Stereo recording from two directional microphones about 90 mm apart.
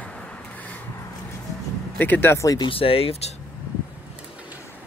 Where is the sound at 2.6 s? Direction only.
90° left.